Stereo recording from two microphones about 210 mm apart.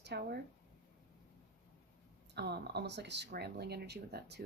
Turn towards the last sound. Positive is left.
turn(degrees=-50)  # may be behind; listen again after turning